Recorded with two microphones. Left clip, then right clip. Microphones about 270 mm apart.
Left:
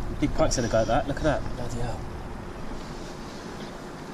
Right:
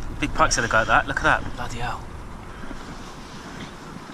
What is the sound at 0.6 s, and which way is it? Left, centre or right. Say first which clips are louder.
Speech: right 5 dB; right.